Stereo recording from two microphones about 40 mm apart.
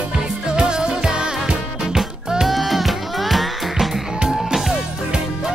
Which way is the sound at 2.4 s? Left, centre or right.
Centre.